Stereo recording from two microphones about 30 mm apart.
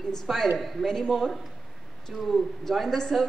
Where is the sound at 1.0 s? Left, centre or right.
Centre.